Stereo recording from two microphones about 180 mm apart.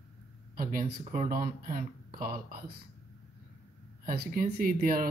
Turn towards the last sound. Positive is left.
turn(degrees=-55)  # may be behind; listen again after turning